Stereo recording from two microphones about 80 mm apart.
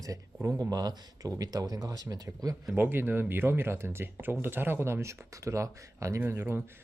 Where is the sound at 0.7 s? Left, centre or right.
Right.